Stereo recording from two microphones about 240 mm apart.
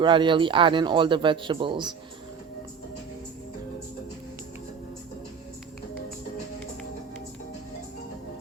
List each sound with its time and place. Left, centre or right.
0.0 s a man's voice: centre